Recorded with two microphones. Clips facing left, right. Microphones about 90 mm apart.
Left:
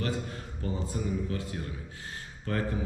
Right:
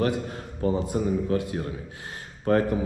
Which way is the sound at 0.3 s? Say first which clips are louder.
Right 10 dB; 60° right (ahead or behind).